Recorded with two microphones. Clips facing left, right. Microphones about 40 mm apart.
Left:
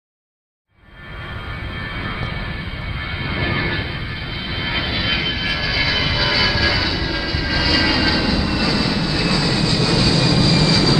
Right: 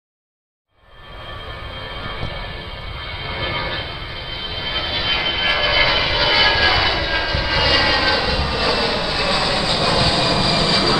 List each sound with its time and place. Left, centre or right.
3.3 s vehicle: centre
5.3 s vehicle: right
6.4 s vehicle: right